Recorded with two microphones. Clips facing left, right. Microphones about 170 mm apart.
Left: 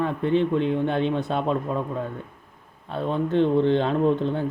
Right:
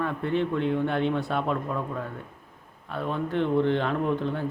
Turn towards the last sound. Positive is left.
turn(degrees=25)  # may be behind; listen again after turning